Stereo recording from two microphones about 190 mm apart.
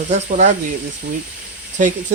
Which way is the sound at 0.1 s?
40° right (ahead or behind).